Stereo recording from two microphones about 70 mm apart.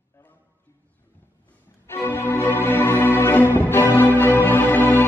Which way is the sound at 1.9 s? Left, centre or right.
Left.